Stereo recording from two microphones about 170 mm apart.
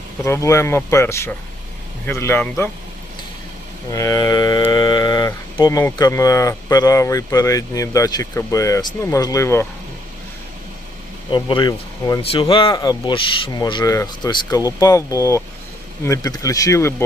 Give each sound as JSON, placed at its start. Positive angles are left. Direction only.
{"t": 0.3, "sound": "speech", "side_deg": 15}
{"t": 3.9, "sound": "speech", "side_deg": 20}
{"t": 11.3, "sound": "speech", "side_deg": 30}